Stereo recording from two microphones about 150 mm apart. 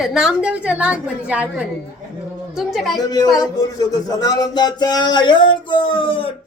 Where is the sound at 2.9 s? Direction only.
25° left (ahead or behind).